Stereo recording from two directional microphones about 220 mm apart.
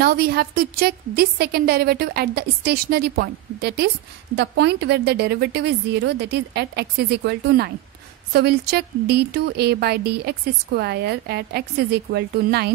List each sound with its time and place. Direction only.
0.0 s a woman's voice: 45° right (ahead or behind)